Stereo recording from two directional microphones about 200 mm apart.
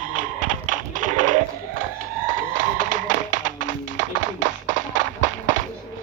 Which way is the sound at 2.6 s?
40° right (ahead or behind).